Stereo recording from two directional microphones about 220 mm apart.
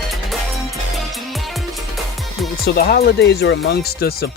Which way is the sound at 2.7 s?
45° left (ahead or behind).